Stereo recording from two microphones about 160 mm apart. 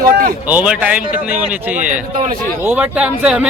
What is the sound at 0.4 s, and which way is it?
A man's voice, 10° right (ahead or behind).